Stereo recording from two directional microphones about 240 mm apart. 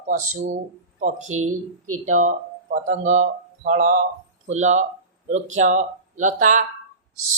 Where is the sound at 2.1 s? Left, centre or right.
Right.